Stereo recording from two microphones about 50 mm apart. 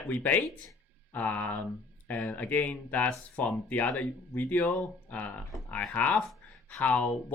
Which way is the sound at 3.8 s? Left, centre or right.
Centre.